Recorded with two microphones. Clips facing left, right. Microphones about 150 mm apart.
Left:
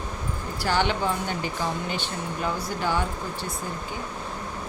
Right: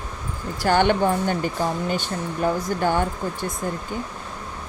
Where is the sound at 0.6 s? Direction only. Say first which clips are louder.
Right 6 dB; 50° right (ahead or behind).